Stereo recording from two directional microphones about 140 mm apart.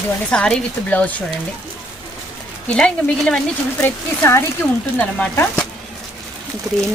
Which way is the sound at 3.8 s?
15° left (ahead or behind).